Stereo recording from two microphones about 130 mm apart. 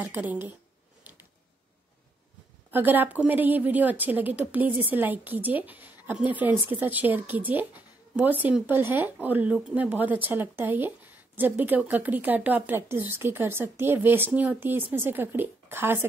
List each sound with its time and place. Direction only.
0.1 s a woman's voice: 15° right (ahead or behind)
2.7 s a woman's voice: 15° right (ahead or behind)